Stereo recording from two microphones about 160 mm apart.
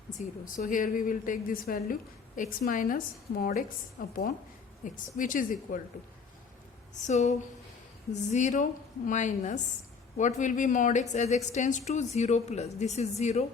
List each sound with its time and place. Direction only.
0.4 s a woman's voice: 55° left (ahead or behind)
6.9 s a woman's voice: 45° left (ahead or behind)